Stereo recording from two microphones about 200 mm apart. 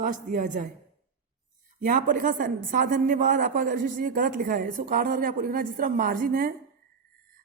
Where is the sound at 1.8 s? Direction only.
40° right (ahead or behind).